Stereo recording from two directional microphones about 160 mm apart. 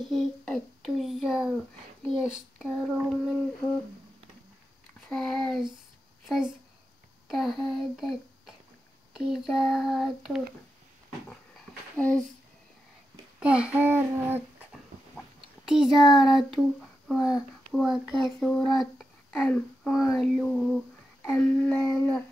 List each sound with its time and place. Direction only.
0.0 s a child's voice: centre (ahead or behind)
2.9 s child singing: 5° right (ahead or behind)
5.1 s a sound: centre (ahead or behind)
6.2 s a child's voice: 5° right (ahead or behind)
13.4 s child singing: 5° right (ahead or behind)
15.1 s a child's voice: 5° right (ahead or behind)
20.2 s a sound: centre (ahead or behind)
21.3 s child singing: 10° left (ahead or behind)